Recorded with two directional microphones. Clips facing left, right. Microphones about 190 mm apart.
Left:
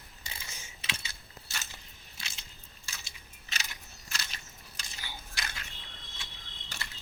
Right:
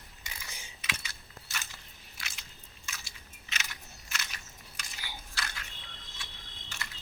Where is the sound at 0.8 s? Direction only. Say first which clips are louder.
Right 1 dB; 30° left (ahead or behind).